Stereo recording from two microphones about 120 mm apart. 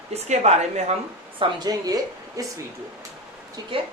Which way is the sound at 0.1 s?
65° right (ahead or behind).